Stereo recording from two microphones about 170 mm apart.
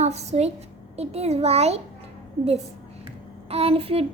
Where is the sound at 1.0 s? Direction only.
40° right (ahead or behind).